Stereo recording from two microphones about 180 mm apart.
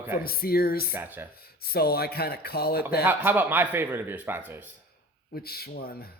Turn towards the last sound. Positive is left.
turn(degrees=60)  # may be behind; listen again after turning